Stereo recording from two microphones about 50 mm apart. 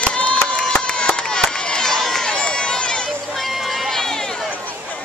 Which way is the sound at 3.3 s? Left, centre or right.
Centre.